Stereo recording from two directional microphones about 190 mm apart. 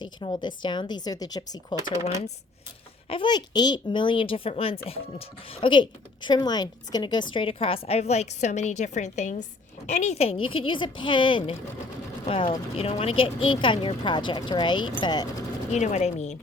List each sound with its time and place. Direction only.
0.0 s speech: 25° left (ahead or behind)
3.1 s a woman's voice: 25° left (ahead or behind)
15.7 s speech: 35° left (ahead or behind)